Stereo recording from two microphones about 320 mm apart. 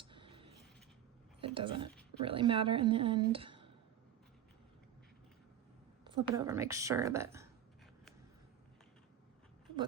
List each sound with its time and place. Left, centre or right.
0.0 s a sound: centre
1.4 s speech: centre
6.1 s speech: centre